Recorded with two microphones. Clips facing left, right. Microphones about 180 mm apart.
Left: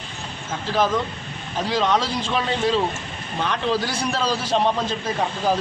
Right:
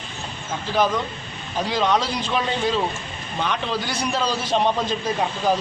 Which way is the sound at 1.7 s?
Centre (ahead or behind).